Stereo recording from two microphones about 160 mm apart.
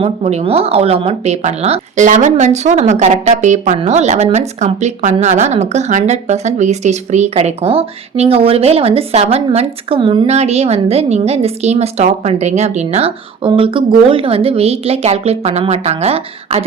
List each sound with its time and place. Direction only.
0.0 s a woman's voice: 45° right (ahead or behind)
10.2 s a woman's voice: 40° right (ahead or behind)